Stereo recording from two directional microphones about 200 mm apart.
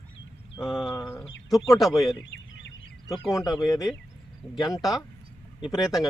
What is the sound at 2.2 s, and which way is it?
Fowl, 65° left (ahead or behind).